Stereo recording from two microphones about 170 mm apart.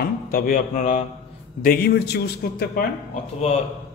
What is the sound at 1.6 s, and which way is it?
A man's voice, 60° left (ahead or behind).